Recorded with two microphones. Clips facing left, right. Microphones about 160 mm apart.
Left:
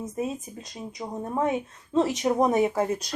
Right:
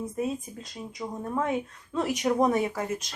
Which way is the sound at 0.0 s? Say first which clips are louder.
Even; 20° left (ahead or behind).